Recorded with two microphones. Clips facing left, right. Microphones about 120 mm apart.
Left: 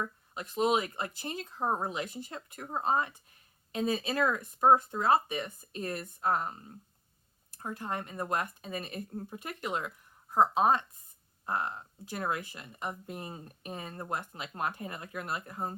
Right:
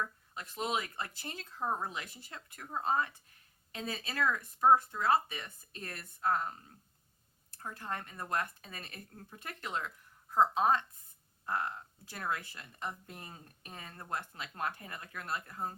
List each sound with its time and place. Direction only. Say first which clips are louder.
0.0 s speech: left 2 dB; 20° left (ahead or behind)